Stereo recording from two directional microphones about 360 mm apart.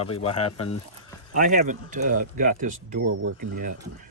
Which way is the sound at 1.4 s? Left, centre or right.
Right.